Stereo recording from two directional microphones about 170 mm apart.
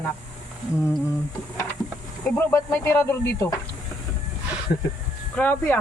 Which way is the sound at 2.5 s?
10° left (ahead or behind).